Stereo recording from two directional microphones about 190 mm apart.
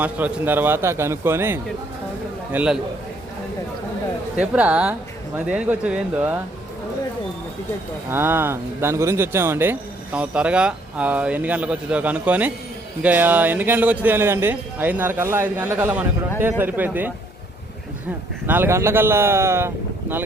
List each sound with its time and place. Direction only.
0.0 s a man's voice: 10° right (ahead or behind)
4.4 s speech: 5° right (ahead or behind)
8.1 s speech: 10° right (ahead or behind)
18.4 s speech: 10° right (ahead or behind)